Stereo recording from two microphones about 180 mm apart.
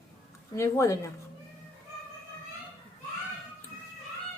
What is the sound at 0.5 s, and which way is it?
Speech, 15° left (ahead or behind).